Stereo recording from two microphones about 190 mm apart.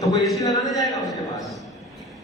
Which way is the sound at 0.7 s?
Centre (ahead or behind).